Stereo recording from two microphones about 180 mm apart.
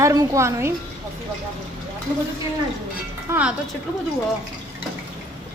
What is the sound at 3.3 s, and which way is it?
Speech, 15° right (ahead or behind).